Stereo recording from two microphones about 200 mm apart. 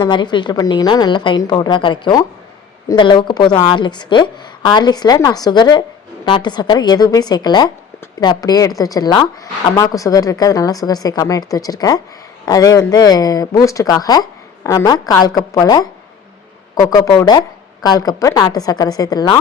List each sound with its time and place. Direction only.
0.0 s a woman's voice: 20° left (ahead or behind)